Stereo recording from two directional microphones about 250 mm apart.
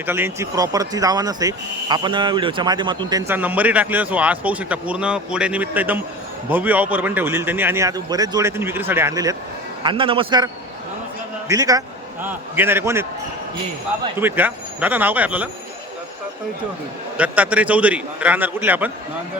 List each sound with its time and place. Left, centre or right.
0.0 s a man's voice: centre
14.2 s speech: centre
17.2 s a man's voice: centre